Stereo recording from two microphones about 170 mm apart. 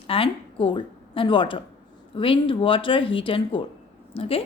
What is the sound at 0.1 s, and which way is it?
A woman's voice, 30° left (ahead or behind).